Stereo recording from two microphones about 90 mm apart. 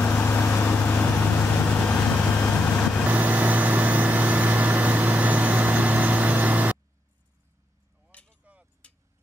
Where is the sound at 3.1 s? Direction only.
20° right (ahead or behind).